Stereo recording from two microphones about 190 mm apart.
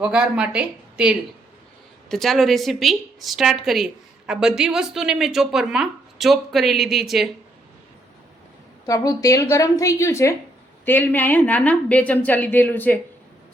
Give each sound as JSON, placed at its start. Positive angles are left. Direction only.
{"t": 0.0, "sound": "a woman's voice", "side_deg": -5}
{"t": 8.9, "sound": "speech", "side_deg": 15}